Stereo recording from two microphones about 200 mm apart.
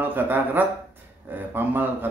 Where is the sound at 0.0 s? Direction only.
10° right (ahead or behind).